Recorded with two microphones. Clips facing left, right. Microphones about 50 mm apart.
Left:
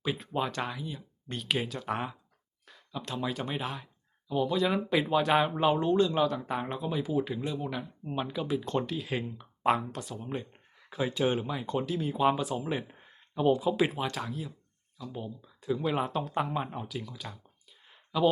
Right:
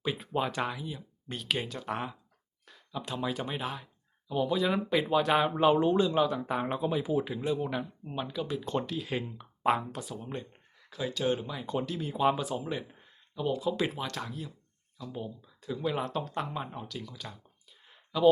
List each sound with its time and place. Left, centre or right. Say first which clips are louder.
0.0 s speech: even; centre
8.0 s speech: left 2 dB; centre
10.3 s a sound: left 3 dB; centre
10.9 s speech: left 2 dB; left
11.6 s speech: left 2 dB; centre
12.6 s speech: left 2 dB; centre
13.7 s speech: left 3 dB; centre
16.8 s a sound: left 2 dB; centre